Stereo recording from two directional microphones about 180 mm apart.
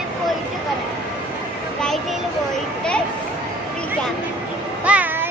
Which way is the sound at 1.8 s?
Centre (ahead or behind).